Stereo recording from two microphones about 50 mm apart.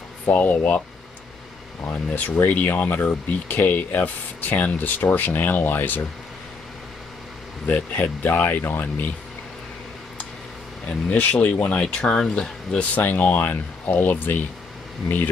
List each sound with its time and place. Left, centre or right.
0.3 s speech: left
2.3 s speech: left
7.6 s speech: left
8.3 s speech: left
10.9 s speech: left
11.8 s speech: centre
12.9 s speech: left